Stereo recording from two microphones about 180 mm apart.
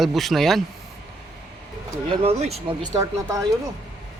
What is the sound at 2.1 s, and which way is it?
Speech, 30° right (ahead or behind).